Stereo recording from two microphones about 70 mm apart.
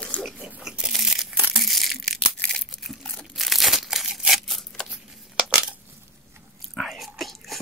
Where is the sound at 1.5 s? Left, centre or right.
Centre.